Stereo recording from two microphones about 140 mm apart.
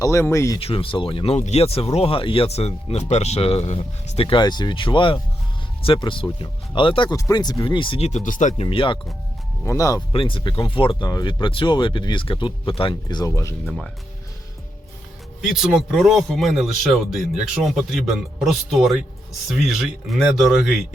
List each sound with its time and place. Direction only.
0.0 s speech: 20° left (ahead or behind)
0.6 s speech: 40° left (ahead or behind)
4.3 s speech: 30° left (ahead or behind)
8.0 s speech: 60° left (ahead or behind)
8.6 s speech: 40° left (ahead or behind)
9.6 s speech: 25° left (ahead or behind)
10.1 s speech: 40° left (ahead or behind); by 13.5 s 20° left (ahead or behind)
13.7 s speech: 5° left (ahead or behind)
15.4 s speech: centre (ahead or behind)